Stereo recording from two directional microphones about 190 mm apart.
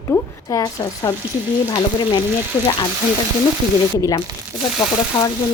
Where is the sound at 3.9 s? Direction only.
20° left (ahead or behind).